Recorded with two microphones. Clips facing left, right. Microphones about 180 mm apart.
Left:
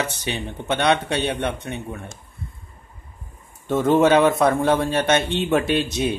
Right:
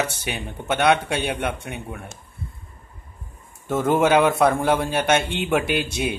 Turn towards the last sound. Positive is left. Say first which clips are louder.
# left 2 dB
turn(degrees=-10)  # may be behind; listen again after turning